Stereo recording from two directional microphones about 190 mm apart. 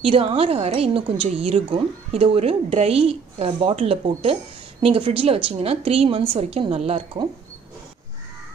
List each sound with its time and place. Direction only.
0.0 s speech: 30° right (ahead or behind)